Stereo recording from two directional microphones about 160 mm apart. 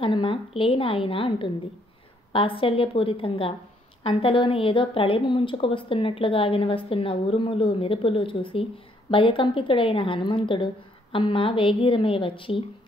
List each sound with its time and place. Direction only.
0.0 s a woman's voice: 30° left (ahead or behind)